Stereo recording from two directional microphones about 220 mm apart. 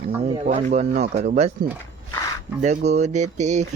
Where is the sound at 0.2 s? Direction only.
25° right (ahead or behind).